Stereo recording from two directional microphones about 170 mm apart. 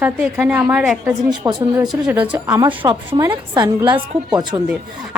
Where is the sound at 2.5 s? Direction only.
25° right (ahead or behind).